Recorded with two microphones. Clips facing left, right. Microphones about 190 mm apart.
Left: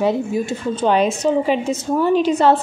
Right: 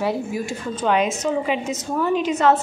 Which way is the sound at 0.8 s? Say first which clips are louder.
Left 4 dB; 30° left (ahead or behind).